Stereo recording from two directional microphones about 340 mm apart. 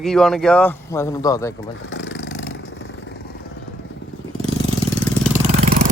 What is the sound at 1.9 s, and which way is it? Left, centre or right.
Vehicle, left.